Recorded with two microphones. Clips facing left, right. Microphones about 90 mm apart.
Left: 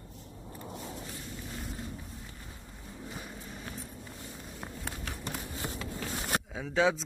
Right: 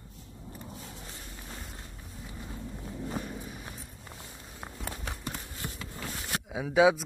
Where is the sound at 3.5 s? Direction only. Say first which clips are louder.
Left 1 dB; 5° right (ahead or behind).